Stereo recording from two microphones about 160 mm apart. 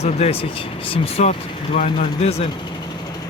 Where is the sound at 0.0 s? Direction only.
40° left (ahead or behind).